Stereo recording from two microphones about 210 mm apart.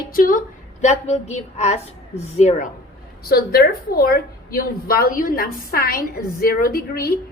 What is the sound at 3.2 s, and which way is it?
A woman's voice, 45° left (ahead or behind).